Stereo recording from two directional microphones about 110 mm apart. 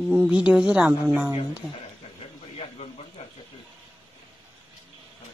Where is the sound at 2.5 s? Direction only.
65° left (ahead or behind).